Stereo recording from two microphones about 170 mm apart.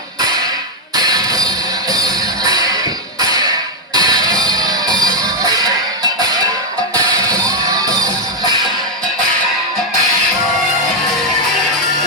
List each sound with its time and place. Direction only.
0.9 s music: 20° right (ahead or behind)